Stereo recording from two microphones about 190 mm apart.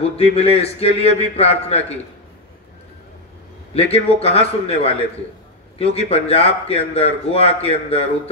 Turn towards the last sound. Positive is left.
turn(degrees=35)  # may be behind; listen again after turning